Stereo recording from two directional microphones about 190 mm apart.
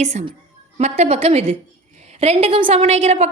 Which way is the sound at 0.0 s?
35° right (ahead or behind).